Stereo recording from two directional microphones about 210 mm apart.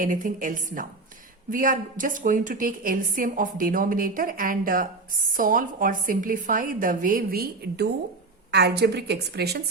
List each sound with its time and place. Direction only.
0.0 s a woman's voice: 40° right (ahead or behind)